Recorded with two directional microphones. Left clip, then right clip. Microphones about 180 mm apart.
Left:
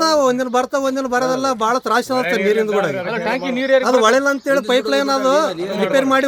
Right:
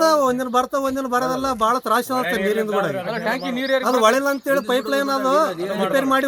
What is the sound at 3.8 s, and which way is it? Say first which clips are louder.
Speech: even; 5° left (ahead or behind).